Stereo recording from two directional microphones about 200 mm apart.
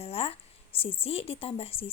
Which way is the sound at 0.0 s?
30° left (ahead or behind).